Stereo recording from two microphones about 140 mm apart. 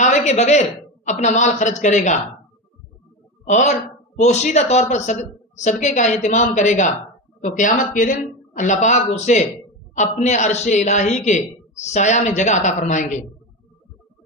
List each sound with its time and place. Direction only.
0.0 s a man's voice: 55° left (ahead or behind)
3.4 s a woman's voice: 60° left (ahead or behind)